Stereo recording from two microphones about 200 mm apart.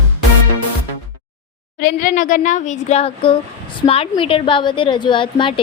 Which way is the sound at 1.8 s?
40° left (ahead or behind).